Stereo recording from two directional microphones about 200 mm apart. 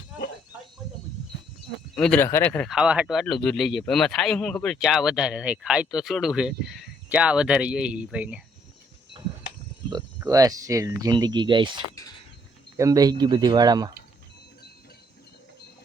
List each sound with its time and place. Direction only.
2.0 s speech: 5° left (ahead or behind)
2.7 s speech: 5° right (ahead or behind)
10.2 s speech: 15° right (ahead or behind)